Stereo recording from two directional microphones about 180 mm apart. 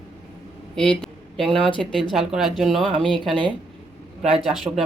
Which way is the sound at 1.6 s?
5° left (ahead or behind).